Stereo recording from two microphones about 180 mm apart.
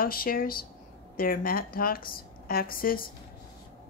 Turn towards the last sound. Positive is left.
turn(degrees=55)  # may be behind; listen again after turning